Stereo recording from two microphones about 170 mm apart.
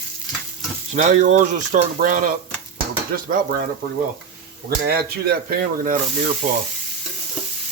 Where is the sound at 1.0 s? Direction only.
45° right (ahead or behind).